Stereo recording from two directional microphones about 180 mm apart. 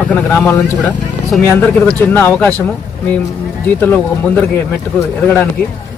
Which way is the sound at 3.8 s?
10° left (ahead or behind).